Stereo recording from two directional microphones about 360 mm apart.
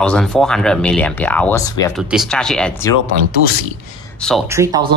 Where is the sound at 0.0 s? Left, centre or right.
Centre.